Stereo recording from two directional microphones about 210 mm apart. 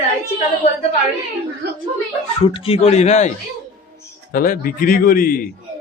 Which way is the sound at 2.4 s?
25° left (ahead or behind).